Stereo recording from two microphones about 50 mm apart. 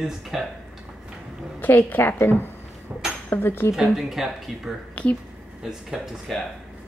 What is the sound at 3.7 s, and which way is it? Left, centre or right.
Speech, centre.